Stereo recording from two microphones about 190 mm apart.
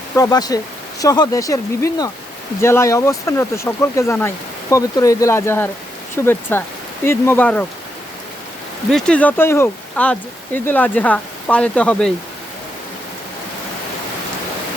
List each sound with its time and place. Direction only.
0.2 s speech: 20° left (ahead or behind)
8.9 s speech: 5° left (ahead or behind)